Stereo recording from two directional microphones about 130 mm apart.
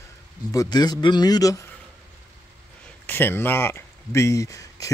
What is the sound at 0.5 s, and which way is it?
A man's voice, 30° left (ahead or behind).